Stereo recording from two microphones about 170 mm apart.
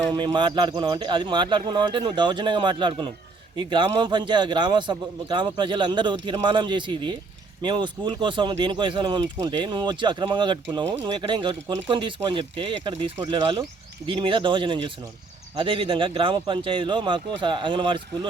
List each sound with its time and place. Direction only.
0.1 s a man's voice: 25° right (ahead or behind)